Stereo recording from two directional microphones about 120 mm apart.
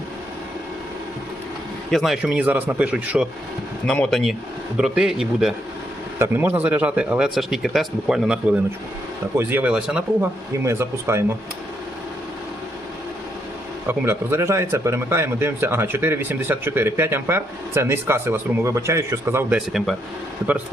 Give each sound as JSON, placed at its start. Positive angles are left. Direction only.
{"t": 1.9, "sound": "a man's voice", "side_deg": 0}
{"t": 3.8, "sound": "speech", "side_deg": 5}
{"t": 6.1, "sound": "a man's voice", "side_deg": -20}
{"t": 10.6, "sound": "speech", "side_deg": -20}
{"t": 13.8, "sound": "speech", "side_deg": -20}
{"t": 19.5, "sound": "speech", "side_deg": 0}